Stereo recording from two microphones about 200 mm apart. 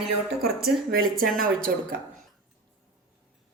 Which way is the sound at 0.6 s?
45° right (ahead or behind).